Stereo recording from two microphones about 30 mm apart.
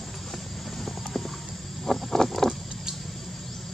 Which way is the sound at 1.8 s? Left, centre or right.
Centre.